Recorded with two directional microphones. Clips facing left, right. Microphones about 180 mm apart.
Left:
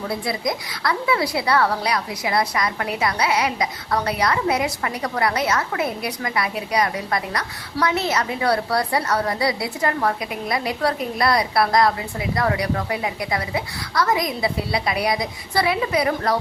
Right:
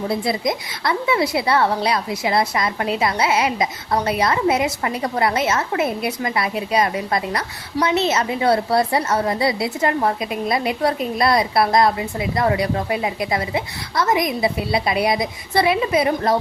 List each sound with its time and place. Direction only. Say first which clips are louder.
0.1 s a woman's voice: right 2 dB; 25° right (ahead or behind)